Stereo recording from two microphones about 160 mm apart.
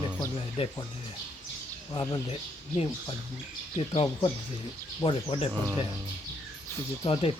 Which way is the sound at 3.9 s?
30° left (ahead or behind).